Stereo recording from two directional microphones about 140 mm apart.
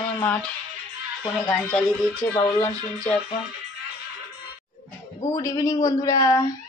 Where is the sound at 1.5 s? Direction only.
10° left (ahead or behind).